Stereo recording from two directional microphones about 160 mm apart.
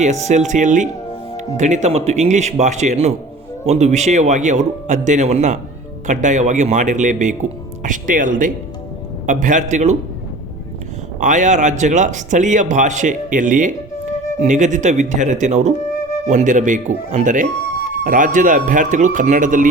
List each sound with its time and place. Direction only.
0.0 s a man's voice: 45° right (ahead or behind)
11.2 s a man's voice: 50° right (ahead or behind)